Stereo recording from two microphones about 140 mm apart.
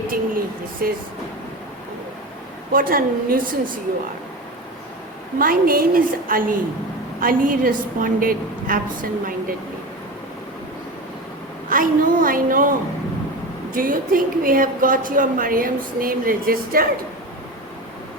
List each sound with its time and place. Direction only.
0.1 s a sound: 90° right
2.7 s a woman's voice: 90° right
5.4 s a woman's voice: 90° right
11.7 s a woman's voice: 80° right
13.7 s a woman's voice: 85° right